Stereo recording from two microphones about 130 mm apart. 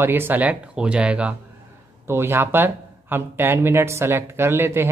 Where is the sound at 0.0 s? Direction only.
15° right (ahead or behind).